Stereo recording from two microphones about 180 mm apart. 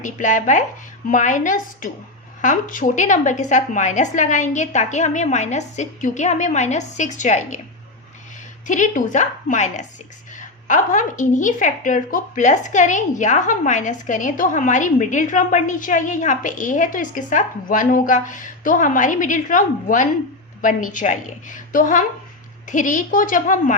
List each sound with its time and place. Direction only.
0.0 s a woman's voice: 45° left (ahead or behind)
8.6 s a woman's voice: 45° left (ahead or behind)